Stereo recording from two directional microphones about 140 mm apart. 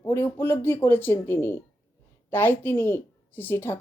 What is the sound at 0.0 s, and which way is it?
Speech, 15° left (ahead or behind).